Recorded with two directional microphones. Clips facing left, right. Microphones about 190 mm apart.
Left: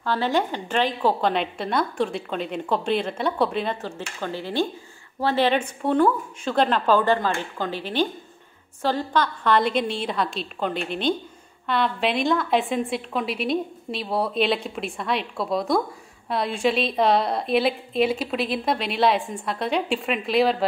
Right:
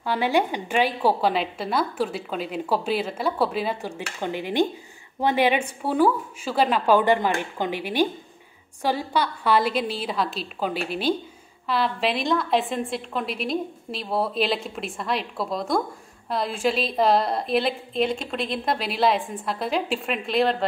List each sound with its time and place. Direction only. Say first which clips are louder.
0.0 s a woman's voice: right 1 dB; 15° right (ahead or behind)
4.2 s a woman's voice: right 2 dB; 15° right (ahead or behind); by 20.6 s centre (ahead or behind)